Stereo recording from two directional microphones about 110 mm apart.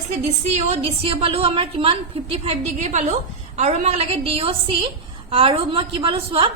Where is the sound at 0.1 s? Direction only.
80° right; by 6.5 s 55° right (ahead or behind).